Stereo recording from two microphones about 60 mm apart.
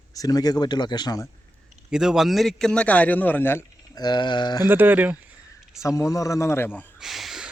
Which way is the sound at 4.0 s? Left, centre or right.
Left.